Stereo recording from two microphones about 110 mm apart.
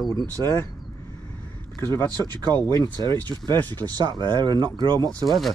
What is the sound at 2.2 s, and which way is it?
Speech, 40° right (ahead or behind).